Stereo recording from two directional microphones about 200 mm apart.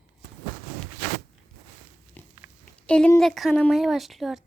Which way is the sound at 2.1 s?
10° left (ahead or behind).